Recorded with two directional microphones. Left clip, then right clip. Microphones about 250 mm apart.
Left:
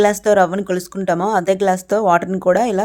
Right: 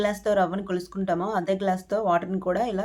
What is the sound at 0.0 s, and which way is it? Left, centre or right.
Speech, left.